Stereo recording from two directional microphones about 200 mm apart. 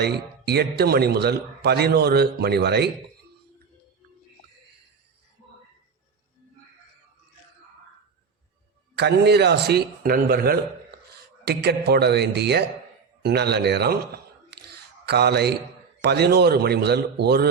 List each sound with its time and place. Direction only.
0.0 s a man's voice: 55° right (ahead or behind)
9.0 s a man's voice: 55° right (ahead or behind)
14.5 s a sound: 55° right (ahead or behind)
16.0 s a man's voice: 55° right (ahead or behind)